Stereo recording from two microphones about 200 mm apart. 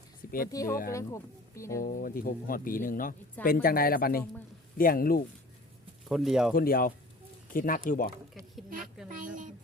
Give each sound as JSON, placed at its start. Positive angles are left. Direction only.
{"t": 0.4, "sound": "speech", "side_deg": 15}
{"t": 1.8, "sound": "speech", "side_deg": 45}
{"t": 6.1, "sound": "speech", "side_deg": 0}
{"t": 6.5, "sound": "speech", "side_deg": 45}
{"t": 9.0, "sound": "speech", "side_deg": -40}